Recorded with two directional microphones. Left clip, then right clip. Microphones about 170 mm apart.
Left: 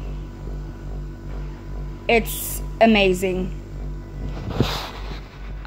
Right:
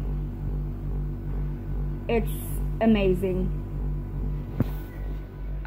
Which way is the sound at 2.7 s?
60° left (ahead or behind).